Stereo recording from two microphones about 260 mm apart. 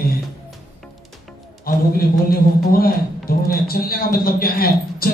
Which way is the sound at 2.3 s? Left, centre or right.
Left.